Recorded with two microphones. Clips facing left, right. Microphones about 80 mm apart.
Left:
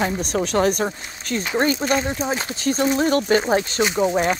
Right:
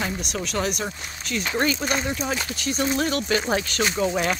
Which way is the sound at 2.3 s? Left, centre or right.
Left.